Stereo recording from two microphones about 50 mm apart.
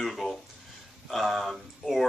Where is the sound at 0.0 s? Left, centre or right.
Centre.